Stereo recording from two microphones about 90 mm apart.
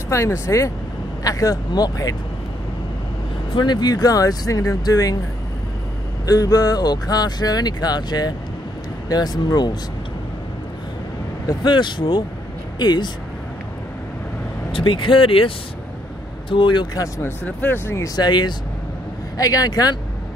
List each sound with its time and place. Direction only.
0.1 s speech: 35° left (ahead or behind)
3.5 s speech: 55° left (ahead or behind)
6.2 s speech: 45° left (ahead or behind)
11.4 s speech: 55° left (ahead or behind)
14.7 s speech: 75° left (ahead or behind)
16.4 s speech: 60° left (ahead or behind)
17.5 s speech: 20° left (ahead or behind)
18.0 s speech: 50° left (ahead or behind)
19.3 s speech: 40° left (ahead or behind)